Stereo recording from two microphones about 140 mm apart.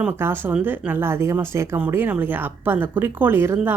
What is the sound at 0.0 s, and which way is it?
Speech, 15° right (ahead or behind).